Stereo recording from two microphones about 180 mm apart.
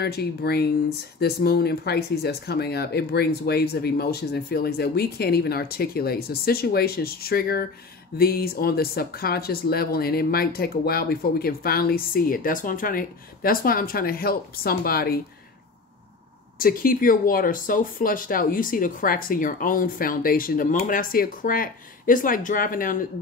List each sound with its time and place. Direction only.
0.0 s speech: 60° left (ahead or behind)
16.5 s speech: 50° left (ahead or behind)